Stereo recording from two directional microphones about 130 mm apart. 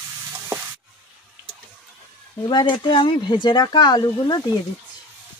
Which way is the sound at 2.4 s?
35° left (ahead or behind).